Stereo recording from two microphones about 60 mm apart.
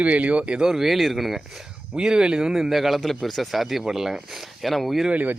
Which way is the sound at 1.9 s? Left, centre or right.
Centre.